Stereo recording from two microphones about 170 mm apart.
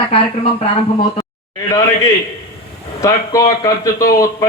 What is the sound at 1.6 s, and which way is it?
A man's voice, 20° left (ahead or behind).